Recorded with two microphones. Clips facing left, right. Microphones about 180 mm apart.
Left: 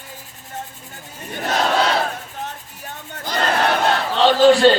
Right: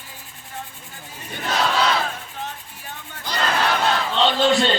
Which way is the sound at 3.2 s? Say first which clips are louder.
Left 3 dB; 50° left (ahead or behind).